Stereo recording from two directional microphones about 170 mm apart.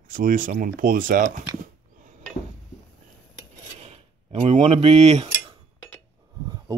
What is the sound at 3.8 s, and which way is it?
Speech, 35° right (ahead or behind).